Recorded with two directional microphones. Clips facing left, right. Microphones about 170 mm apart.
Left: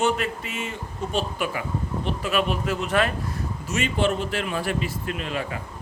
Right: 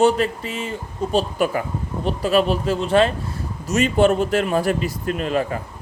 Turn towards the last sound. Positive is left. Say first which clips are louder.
# right 7 dB
turn(degrees=-40)  # may be behind; listen again after turning